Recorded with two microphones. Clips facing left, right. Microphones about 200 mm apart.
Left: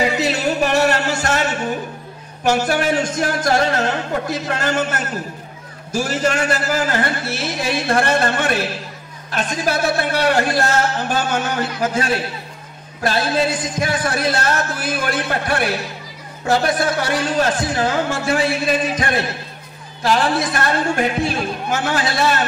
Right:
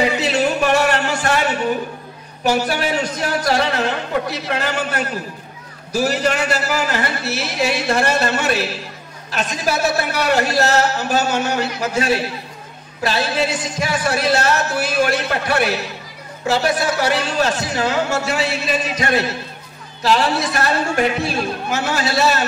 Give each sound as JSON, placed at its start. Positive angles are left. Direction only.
{"t": 0.2, "sound": "a sound", "side_deg": 40}
{"t": 2.4, "sound": "music", "side_deg": 50}
{"t": 13.0, "sound": "music", "side_deg": 50}